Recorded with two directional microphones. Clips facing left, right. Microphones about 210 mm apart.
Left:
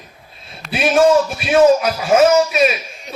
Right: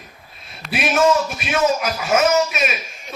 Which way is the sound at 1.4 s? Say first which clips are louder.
Left 8 dB; 35° left (ahead or behind).